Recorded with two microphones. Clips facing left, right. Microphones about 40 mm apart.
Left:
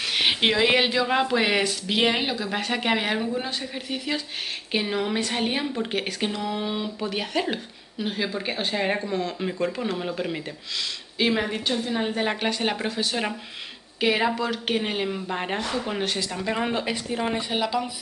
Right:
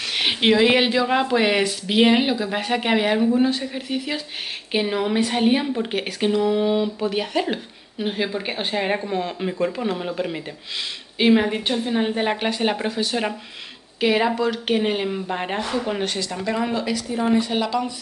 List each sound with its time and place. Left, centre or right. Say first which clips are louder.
0.1 s speech: right 4 dB; centre
8.0 s a woman's voice: right 3 dB; centre
9.4 s speech: right 3 dB; centre
11.1 s a woman's voice: right 6 dB; centre
16.4 s speech: right 3 dB; left
17.5 s speech: right 3 dB; centre